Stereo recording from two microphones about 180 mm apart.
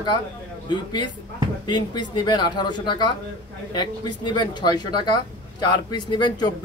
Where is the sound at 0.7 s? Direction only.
25° left (ahead or behind).